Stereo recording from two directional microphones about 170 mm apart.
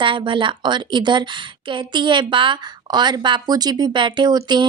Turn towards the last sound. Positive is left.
turn(degrees=-25)  # may be behind; listen again after turning